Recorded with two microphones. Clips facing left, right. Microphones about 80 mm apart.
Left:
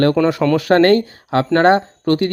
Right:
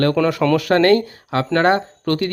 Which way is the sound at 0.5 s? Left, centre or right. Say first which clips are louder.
Left 2 dB; left.